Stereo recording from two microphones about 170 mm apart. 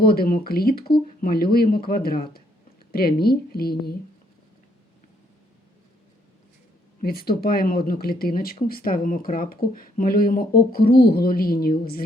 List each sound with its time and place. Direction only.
0.0 s speech: 65° left (ahead or behind)
7.0 s speech: 65° left (ahead or behind)